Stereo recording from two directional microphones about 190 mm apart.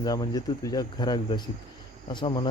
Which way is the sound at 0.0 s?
20° left (ahead or behind).